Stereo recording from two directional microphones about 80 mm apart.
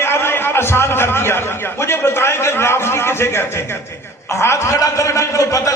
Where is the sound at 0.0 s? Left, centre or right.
Left.